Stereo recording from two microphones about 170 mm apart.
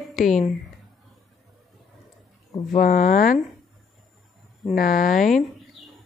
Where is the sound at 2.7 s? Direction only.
55° left (ahead or behind).